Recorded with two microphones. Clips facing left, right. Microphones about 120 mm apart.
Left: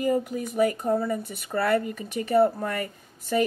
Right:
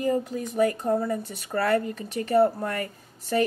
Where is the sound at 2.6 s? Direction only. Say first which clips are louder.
Even; 40° right (ahead or behind).